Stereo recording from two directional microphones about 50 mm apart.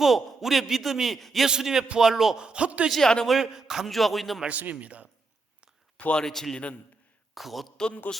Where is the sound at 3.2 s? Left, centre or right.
Centre.